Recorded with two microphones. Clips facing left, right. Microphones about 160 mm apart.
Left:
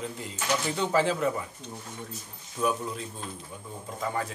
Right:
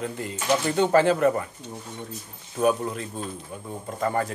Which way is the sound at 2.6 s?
60° right (ahead or behind).